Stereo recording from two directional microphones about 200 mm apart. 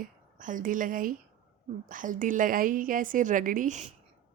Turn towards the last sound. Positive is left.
turn(degrees=-35)  # may be behind; listen again after turning